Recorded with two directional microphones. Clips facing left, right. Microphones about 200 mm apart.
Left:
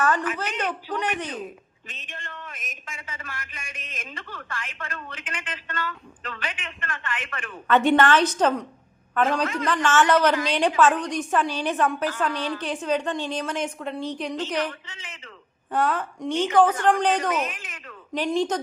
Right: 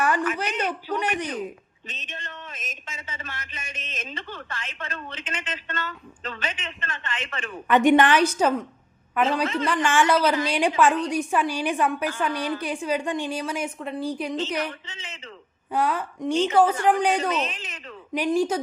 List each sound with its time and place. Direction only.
0.3 s a woman's voice: 10° right (ahead or behind)
1.9 s a man's voice: 20° right (ahead or behind)
14.8 s a man's voice: 25° right (ahead or behind)
15.7 s a woman's voice: 10° right (ahead or behind)
17.3 s a man's voice: 25° right (ahead or behind)
18.1 s a woman's voice: 10° right (ahead or behind)